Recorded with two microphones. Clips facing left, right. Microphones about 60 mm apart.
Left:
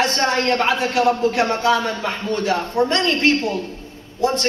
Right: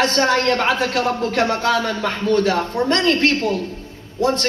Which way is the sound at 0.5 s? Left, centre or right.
Right.